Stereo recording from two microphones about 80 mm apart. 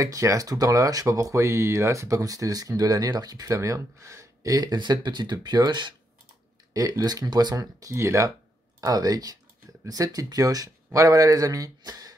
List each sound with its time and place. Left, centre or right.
0.0 s speech: right
6.7 s speech: right
8.8 s speech: right